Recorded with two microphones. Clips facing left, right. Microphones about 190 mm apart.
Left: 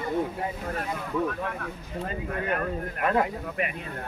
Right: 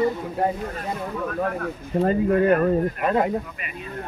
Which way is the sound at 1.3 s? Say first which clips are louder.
Right 7 dB; 45° right (ahead or behind).